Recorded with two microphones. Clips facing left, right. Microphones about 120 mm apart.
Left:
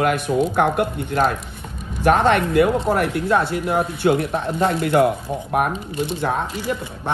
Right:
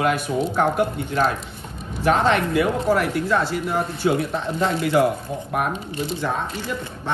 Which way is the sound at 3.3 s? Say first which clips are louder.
Left 4 dB; 60° left (ahead or behind).